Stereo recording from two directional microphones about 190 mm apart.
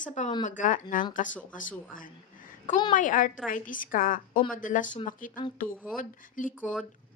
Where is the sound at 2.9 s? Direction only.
45° left (ahead or behind).